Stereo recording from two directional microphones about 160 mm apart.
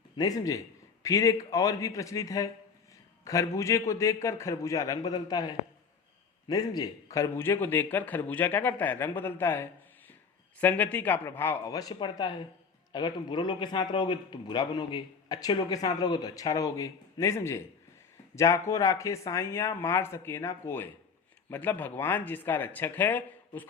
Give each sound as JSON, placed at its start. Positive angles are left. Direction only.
{"t": 0.2, "sound": "a man's voice", "side_deg": 25}